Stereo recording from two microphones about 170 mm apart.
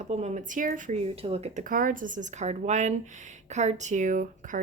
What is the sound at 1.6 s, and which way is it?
Speech, 55° right (ahead or behind).